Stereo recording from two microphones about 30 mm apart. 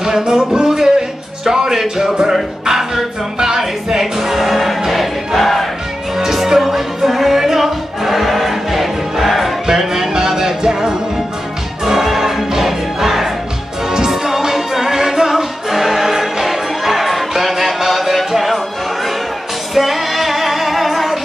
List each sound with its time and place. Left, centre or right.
0.0 s music: centre
0.5 s a sound: centre
1.4 s music: centre
2.6 s speech: centre
3.3 s music: centre
4.9 s choir: centre
6.1 s music: centre
9.7 s music: centre
11.8 s music: centre
19.7 s female singing: centre